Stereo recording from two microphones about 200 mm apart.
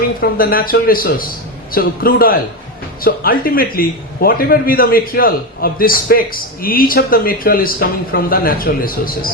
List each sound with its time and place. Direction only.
0.2 s a man's voice: 45° left (ahead or behind)